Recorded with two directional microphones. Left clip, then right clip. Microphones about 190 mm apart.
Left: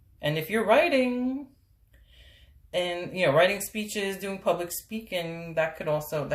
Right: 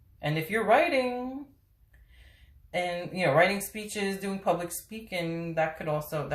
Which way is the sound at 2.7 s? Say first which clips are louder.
Left 2 dB; 45° left (ahead or behind).